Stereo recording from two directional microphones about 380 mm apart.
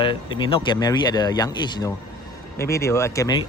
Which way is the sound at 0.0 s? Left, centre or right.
Centre.